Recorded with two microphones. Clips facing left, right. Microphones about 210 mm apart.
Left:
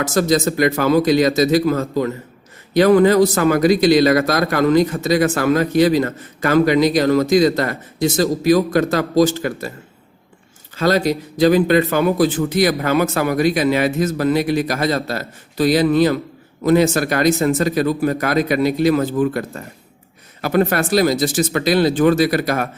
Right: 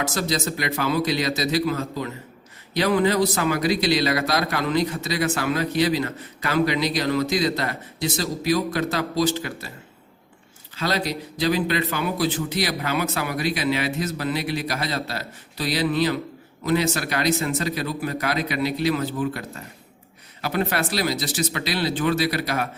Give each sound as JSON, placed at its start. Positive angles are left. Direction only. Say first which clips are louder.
{"t": 0.0, "sound": "a man's voice", "louder": "left 9 dB", "side_deg": 45}
{"t": 10.8, "sound": "a man's voice", "louder": "left 9 dB", "side_deg": 45}